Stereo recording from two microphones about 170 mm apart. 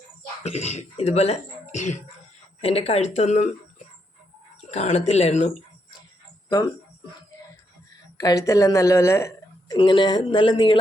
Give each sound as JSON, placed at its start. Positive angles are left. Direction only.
{"t": 0.4, "sound": "speech", "side_deg": 40}
{"t": 4.7, "sound": "speech", "side_deg": 40}
{"t": 8.2, "sound": "a woman's voice", "side_deg": 20}
{"t": 9.7, "sound": "speech", "side_deg": 30}